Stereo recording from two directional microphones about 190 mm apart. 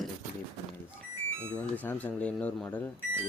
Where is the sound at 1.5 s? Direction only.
10° left (ahead or behind).